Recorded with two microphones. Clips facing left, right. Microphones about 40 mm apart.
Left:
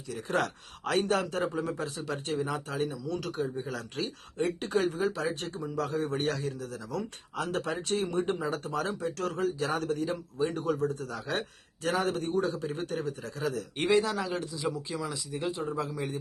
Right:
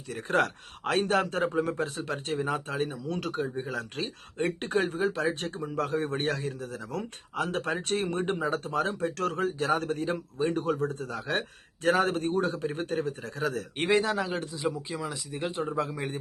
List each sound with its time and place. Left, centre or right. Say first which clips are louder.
0.1 s a man's voice: right 3 dB; right
14.7 s speech: left 2 dB; centre
15.1 s a man's voice: right 1 dB; right